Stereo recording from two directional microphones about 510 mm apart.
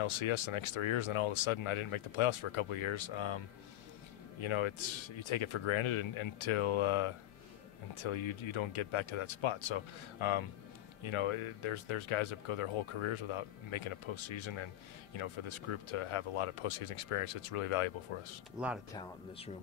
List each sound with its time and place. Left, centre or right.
0.0 s speech: left
18.9 s speech: centre